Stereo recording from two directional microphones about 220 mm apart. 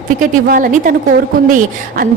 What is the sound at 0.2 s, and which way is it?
Speech, 40° right (ahead or behind).